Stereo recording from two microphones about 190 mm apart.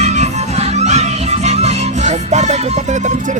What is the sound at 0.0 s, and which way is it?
Music, 35° right (ahead or behind).